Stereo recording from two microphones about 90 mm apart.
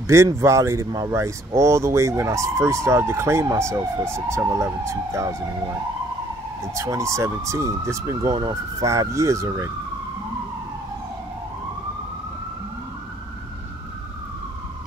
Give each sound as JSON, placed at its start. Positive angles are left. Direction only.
{"t": 0.0, "sound": "speech", "side_deg": -30}
{"t": 6.6, "sound": "speech", "side_deg": -35}